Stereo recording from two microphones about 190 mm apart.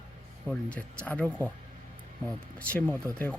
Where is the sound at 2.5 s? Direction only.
10° left (ahead or behind).